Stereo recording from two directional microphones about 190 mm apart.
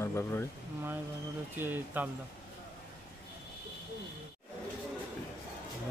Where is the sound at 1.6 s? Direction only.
10° right (ahead or behind).